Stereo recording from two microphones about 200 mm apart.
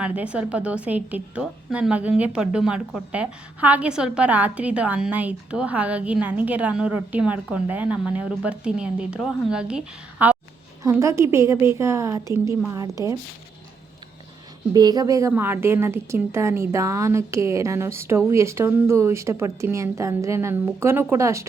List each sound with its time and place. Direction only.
0.0 s a woman's voice: 5° right (ahead or behind)
14.7 s a woman's voice: 20° right (ahead or behind)